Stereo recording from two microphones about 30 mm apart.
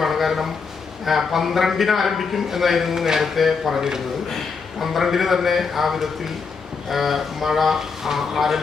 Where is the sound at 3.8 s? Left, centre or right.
Right.